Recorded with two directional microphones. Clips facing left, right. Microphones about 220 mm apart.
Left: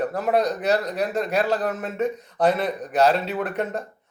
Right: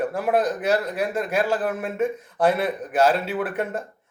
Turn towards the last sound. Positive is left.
turn(degrees=-5)  # may be behind; listen again after turning